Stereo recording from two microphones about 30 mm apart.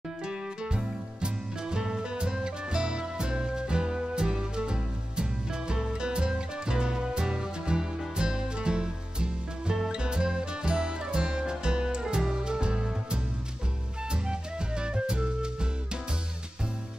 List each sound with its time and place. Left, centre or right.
0.3 s music: right